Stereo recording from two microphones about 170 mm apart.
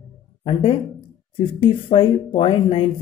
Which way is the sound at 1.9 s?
30° left (ahead or behind).